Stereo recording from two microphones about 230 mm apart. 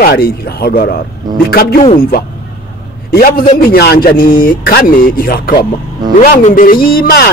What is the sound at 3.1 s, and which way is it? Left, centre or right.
A man's voice, left.